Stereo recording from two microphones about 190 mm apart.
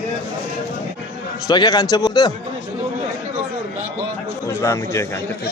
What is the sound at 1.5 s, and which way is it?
Speech, 20° left (ahead or behind).